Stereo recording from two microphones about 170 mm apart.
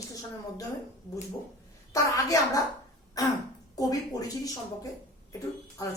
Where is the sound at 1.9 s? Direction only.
20° left (ahead or behind).